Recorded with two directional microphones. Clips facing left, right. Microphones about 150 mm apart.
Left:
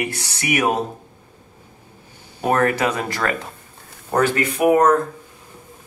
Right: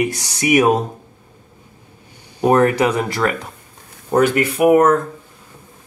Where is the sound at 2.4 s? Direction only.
20° right (ahead or behind).